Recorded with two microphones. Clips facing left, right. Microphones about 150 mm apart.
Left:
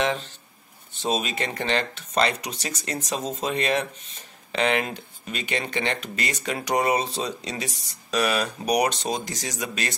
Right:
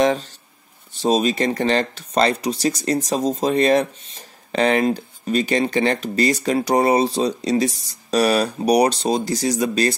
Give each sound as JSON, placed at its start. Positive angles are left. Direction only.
{"t": 0.0, "sound": "speech", "side_deg": -40}